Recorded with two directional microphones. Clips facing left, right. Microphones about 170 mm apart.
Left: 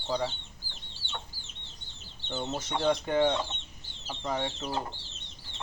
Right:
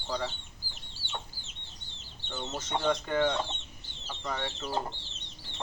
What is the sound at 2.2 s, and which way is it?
Speech, 20° left (ahead or behind).